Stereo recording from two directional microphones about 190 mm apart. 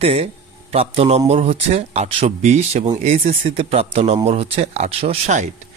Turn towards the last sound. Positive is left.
turn(degrees=-35)  # may be behind; listen again after turning